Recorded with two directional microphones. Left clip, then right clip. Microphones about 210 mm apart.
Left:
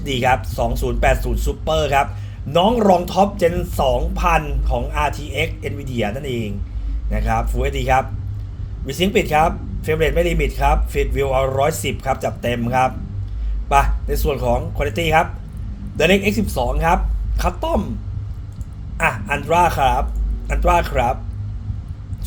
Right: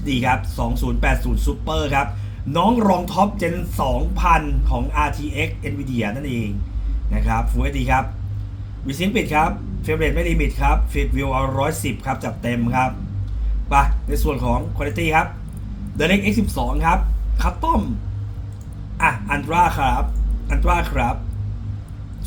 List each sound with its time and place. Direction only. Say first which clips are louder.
0.0 s speech: left 3 dB; 45° left (ahead or behind)
18.9 s speech: even; 45° left (ahead or behind)